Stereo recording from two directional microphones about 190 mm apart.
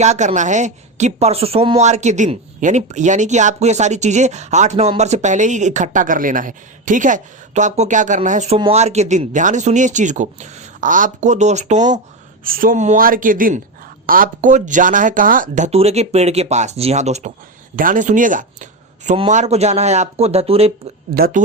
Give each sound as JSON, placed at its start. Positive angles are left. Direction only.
{"t": 0.0, "sound": "speech", "side_deg": -35}
{"t": 21.2, "sound": "speech", "side_deg": -50}